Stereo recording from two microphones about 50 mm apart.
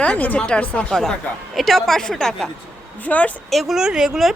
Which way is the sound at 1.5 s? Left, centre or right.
Centre.